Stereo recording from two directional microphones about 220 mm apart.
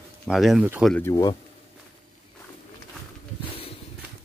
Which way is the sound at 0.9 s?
10° left (ahead or behind).